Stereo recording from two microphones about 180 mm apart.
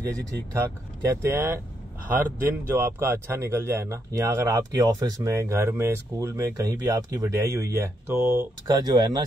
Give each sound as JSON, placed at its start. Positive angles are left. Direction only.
{"t": 0.0, "sound": "speech", "side_deg": -20}
{"t": 2.7, "sound": "speech", "side_deg": -15}